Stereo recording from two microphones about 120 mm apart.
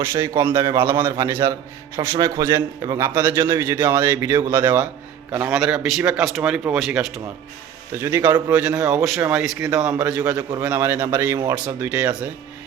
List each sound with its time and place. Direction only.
0.0 s a man's voice: 25° right (ahead or behind); by 7.1 s 5° right (ahead or behind)
7.9 s a man's voice: 20° right (ahead or behind)